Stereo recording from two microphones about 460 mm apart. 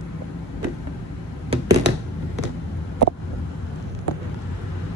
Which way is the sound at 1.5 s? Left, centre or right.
Right.